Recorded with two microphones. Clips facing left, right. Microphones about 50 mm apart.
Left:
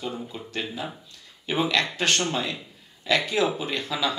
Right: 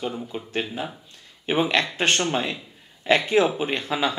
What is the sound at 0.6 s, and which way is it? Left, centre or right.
Speech, right.